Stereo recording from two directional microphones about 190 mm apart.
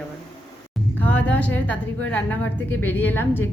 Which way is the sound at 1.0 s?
10° left (ahead or behind).